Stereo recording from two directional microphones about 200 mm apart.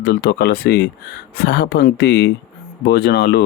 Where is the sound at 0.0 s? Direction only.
55° left (ahead or behind).